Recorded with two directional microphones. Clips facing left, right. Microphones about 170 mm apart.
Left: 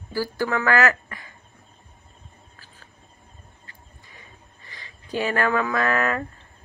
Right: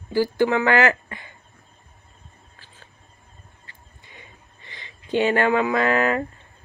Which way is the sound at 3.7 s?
25° right (ahead or behind).